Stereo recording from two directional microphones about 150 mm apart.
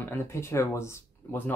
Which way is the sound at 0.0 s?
15° left (ahead or behind).